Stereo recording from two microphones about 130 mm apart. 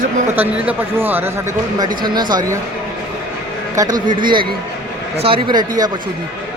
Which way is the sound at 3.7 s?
30° right (ahead or behind).